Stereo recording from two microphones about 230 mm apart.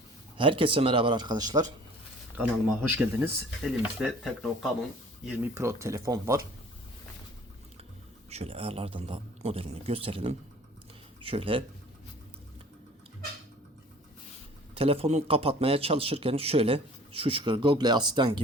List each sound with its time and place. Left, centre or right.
0.3 s a man's voice: right
2.9 s speech: centre
8.3 s a man's voice: right
14.8 s a man's voice: right